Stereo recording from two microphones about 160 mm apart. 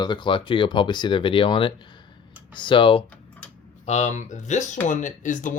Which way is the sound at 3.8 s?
45° left (ahead or behind).